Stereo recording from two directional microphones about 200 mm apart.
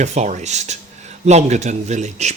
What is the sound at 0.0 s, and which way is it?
Speech, 35° right (ahead or behind).